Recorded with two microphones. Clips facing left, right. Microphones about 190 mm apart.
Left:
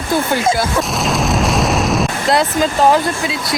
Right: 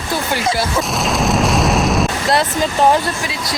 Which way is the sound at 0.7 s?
Centre (ahead or behind).